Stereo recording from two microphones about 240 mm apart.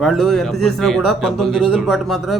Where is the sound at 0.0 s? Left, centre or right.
Centre.